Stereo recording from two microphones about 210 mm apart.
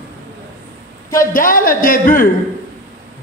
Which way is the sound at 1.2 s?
40° left (ahead or behind).